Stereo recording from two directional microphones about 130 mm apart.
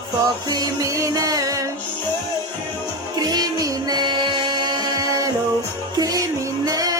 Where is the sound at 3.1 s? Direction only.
30° right (ahead or behind).